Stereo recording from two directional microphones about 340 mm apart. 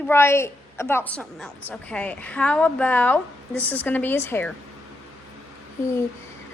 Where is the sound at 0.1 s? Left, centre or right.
Centre.